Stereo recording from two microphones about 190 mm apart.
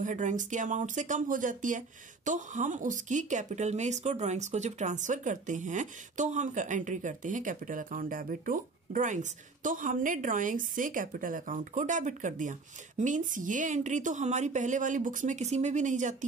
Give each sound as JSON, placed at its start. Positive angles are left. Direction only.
{"t": 0.0, "sound": "speech", "side_deg": -40}